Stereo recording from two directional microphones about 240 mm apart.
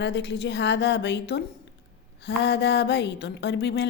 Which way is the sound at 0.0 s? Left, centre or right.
Left.